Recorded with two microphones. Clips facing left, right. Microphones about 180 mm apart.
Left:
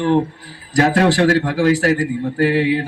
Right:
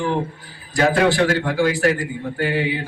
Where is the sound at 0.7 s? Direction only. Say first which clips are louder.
Left 2 dB; 40° left (ahead or behind).